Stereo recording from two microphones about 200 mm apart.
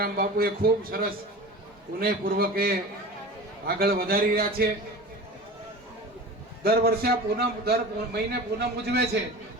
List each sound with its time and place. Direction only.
0.0 s a man's voice: 50° right (ahead or behind)
3.8 s a man's voice: 50° right (ahead or behind)
6.7 s a man's voice: 50° right (ahead or behind)